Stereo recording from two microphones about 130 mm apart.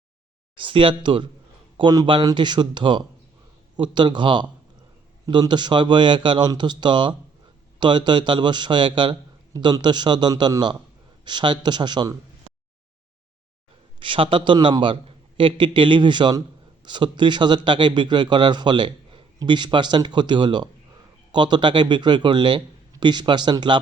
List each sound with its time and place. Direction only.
0.5 s a man's voice: 40° right (ahead or behind)
14.0 s a man's voice: 40° right (ahead or behind)